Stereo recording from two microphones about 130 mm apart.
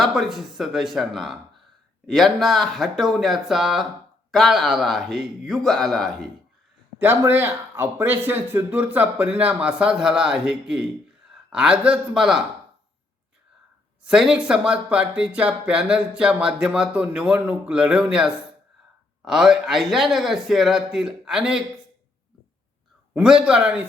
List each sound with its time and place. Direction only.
0.0 s a man's voice: centre (ahead or behind)
7.0 s a man's voice: 15° right (ahead or behind)
14.0 s a man's voice: 5° right (ahead or behind)
23.1 s speech: 5° right (ahead or behind)